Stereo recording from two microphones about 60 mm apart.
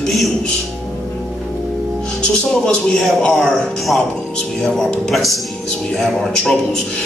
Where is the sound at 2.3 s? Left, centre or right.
Centre.